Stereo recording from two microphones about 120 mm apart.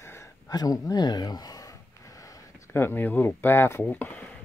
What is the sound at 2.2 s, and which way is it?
Speech, 20° left (ahead or behind).